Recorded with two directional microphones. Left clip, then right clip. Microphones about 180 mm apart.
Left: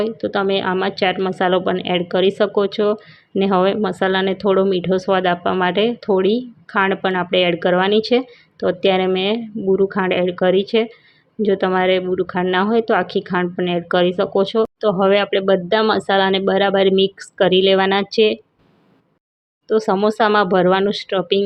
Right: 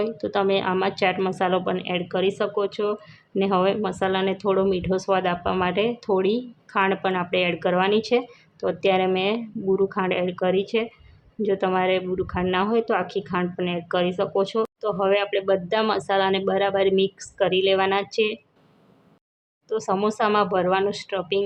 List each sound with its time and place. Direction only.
0.0 s a woman's voice: 15° left (ahead or behind)
19.6 s a woman's voice: 25° left (ahead or behind)